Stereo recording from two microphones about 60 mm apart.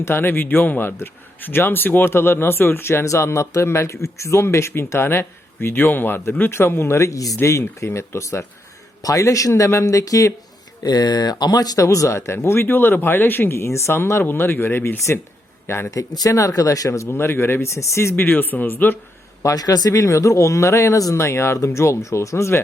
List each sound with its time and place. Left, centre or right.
0.0 s a man's voice: left
7.9 s speech: left
9.0 s speech: left
10.8 s a man's voice: left
16.0 s speech: left
17.1 s speech: left
18.2 s a man's voice: left
19.4 s speech: left